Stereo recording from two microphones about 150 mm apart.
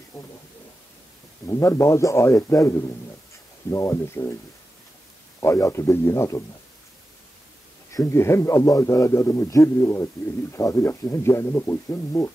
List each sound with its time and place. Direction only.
1.5 s a man's voice: 20° left (ahead or behind)
5.4 s a man's voice: 20° left (ahead or behind)
7.9 s a man's voice: 20° left (ahead or behind)